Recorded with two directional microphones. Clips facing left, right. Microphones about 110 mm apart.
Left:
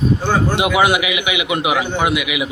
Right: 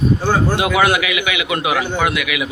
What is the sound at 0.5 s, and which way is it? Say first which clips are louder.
Speech: even; 20° left (ahead or behind).